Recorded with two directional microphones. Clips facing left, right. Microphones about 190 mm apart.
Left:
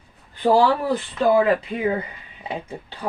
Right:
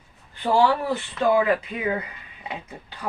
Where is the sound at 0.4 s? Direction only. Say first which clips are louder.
Left 3 dB; 35° left (ahead or behind).